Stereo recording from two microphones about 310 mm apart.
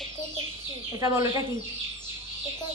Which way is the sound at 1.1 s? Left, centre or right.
Centre.